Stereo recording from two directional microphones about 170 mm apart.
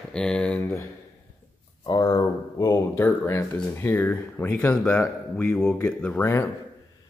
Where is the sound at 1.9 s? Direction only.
25° left (ahead or behind).